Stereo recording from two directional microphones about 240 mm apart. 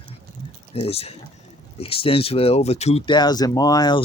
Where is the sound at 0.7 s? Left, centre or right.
Left.